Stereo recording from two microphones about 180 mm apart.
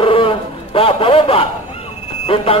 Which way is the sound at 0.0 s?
30° left (ahead or behind).